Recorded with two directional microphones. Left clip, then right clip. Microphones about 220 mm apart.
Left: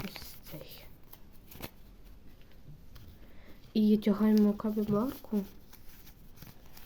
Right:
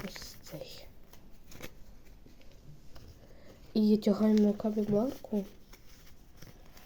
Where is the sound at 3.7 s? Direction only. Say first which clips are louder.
Right 1 dB; 10° left (ahead or behind).